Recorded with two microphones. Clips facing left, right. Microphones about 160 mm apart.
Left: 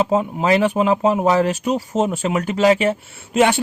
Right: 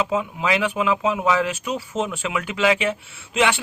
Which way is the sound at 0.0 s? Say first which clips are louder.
Left 5 dB; 45° left (ahead or behind).